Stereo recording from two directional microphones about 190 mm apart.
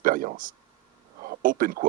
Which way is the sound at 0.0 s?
45° right (ahead or behind).